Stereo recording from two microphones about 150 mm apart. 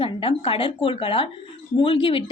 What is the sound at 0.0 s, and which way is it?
A woman's voice, 35° left (ahead or behind).